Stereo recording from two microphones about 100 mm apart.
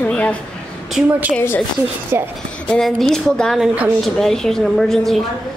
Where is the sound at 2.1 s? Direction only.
25° right (ahead or behind).